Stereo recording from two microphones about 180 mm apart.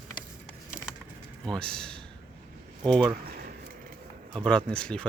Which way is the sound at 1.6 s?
5° left (ahead or behind).